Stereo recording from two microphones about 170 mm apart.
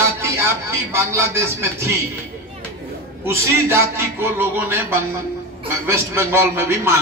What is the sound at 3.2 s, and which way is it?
Speech, 15° right (ahead or behind).